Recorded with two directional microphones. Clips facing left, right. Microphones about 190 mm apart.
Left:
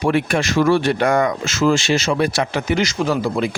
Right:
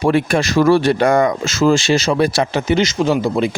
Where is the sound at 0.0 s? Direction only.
35° right (ahead or behind).